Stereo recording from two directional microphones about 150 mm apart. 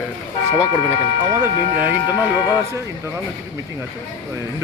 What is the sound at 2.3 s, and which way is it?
Speech, 15° right (ahead or behind).